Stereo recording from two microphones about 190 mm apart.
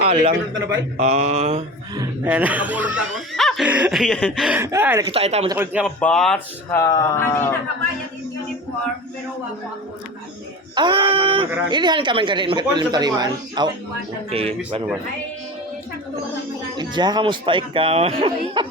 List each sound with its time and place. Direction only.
0.0 s a man's voice: 30° right (ahead or behind)
1.0 s mantra: 35° right (ahead or behind)
2.2 s speech: 10° right (ahead or behind)
5.1 s mantra: 35° right (ahead or behind)
5.5 s speech: 10° right (ahead or behind)
5.8 s speech: 5° left (ahead or behind)
10.8 s speech: 25° right (ahead or behind)
14.3 s mantra: 30° right (ahead or behind)
16.7 s speech: 25° right (ahead or behind)